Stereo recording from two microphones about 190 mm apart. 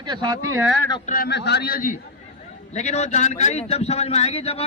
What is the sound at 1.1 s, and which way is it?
Speech, 55° left (ahead or behind).